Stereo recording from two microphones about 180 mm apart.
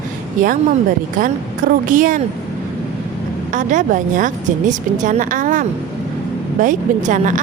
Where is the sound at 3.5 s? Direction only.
45° right (ahead or behind).